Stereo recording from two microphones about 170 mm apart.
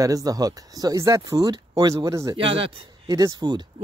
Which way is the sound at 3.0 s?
20° right (ahead or behind).